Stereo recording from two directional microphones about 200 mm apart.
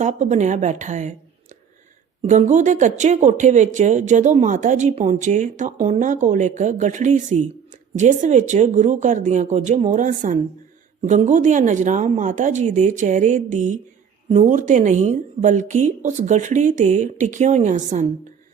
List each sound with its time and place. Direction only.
0.0 s a woman's voice: 40° right (ahead or behind)